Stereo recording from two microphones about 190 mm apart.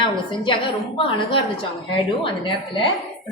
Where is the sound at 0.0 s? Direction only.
25° left (ahead or behind).